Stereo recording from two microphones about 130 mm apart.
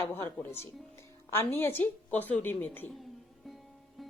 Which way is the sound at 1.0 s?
20° left (ahead or behind).